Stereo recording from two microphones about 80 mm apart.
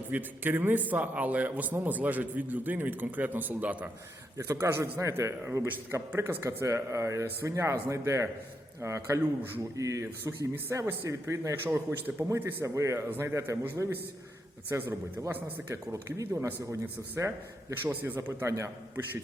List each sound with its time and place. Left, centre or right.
0.1 s a man's voice: right
4.4 s a man's voice: right
10.5 s a man's voice: right
11.5 s a man's voice: right
12.6 s a man's voice: right
14.7 s a man's voice: right
15.7 s a man's voice: right
17.8 s a man's voice: right